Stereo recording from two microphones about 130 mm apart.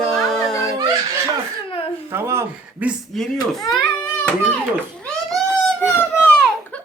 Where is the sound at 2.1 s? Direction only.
20° right (ahead or behind).